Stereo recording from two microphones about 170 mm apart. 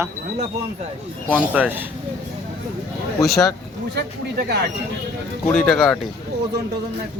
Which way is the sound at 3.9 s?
70° right (ahead or behind).